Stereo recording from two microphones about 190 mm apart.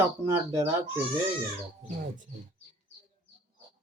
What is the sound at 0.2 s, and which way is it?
Speech, 15° right (ahead or behind).